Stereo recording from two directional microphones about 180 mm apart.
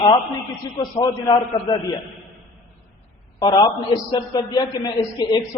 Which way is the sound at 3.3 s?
25° left (ahead or behind).